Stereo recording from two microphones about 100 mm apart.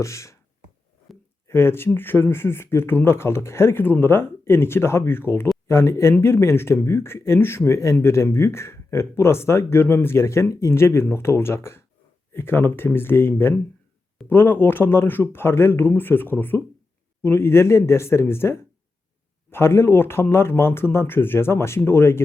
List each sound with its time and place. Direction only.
0.0 s speech: 30° left (ahead or behind)
1.5 s speech: 25° left (ahead or behind)